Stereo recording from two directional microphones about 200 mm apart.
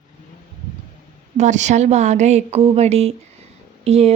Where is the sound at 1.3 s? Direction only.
35° right (ahead or behind).